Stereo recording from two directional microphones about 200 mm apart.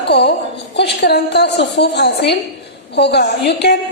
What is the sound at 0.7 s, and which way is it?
A woman's voice, 55° left (ahead or behind).